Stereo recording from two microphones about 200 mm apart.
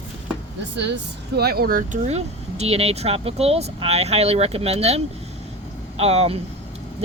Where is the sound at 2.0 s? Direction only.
30° right (ahead or behind).